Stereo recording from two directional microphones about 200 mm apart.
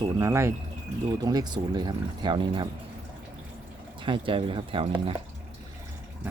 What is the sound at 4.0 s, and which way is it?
Speech, 25° right (ahead or behind).